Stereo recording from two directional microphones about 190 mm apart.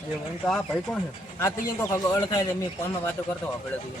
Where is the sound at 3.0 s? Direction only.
10° left (ahead or behind).